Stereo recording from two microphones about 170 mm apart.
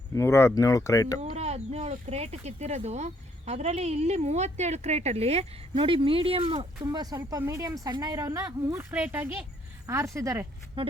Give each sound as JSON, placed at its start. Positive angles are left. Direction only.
{"t": 0.1, "sound": "speech", "side_deg": 15}
{"t": 1.2, "sound": "a sound", "side_deg": -40}
{"t": 2.0, "sound": "speech", "side_deg": -35}